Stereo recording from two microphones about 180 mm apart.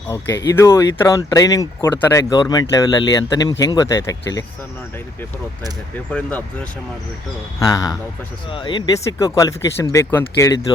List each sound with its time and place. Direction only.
0.5 s speech: 15° left (ahead or behind)
6.1 s speech: 5° left (ahead or behind)
7.6 s speech: 20° left (ahead or behind)